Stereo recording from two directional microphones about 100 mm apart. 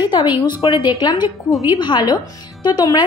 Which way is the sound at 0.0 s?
50° left (ahead or behind).